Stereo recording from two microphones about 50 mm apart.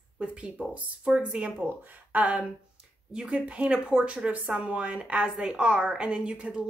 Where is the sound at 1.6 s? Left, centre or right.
Right.